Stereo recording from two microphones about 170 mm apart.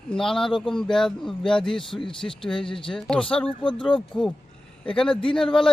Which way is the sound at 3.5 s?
30° left (ahead or behind).